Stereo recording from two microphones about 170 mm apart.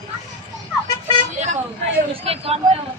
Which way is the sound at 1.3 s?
45° right (ahead or behind).